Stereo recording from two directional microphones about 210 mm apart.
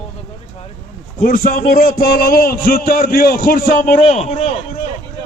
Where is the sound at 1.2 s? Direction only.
45° left (ahead or behind).